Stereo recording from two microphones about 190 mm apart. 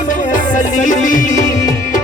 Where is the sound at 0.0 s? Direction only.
45° left (ahead or behind).